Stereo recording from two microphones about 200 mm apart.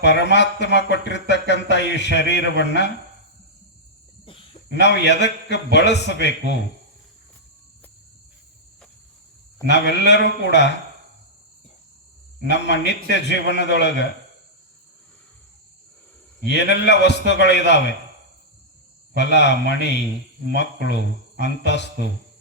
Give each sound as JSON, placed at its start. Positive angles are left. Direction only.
{"t": 0.0, "sound": "a man's voice", "side_deg": 60}
{"t": 4.7, "sound": "a man's voice", "side_deg": 60}
{"t": 9.6, "sound": "a man's voice", "side_deg": 60}
{"t": 12.5, "sound": "a man's voice", "side_deg": 60}
{"t": 16.5, "sound": "a man's voice", "side_deg": 60}
{"t": 19.1, "sound": "a man's voice", "side_deg": 60}